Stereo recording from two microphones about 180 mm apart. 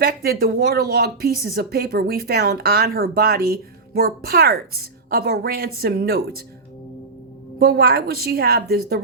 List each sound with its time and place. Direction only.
0.0 s speech: 60° right (ahead or behind)
7.6 s speech: 60° right (ahead or behind)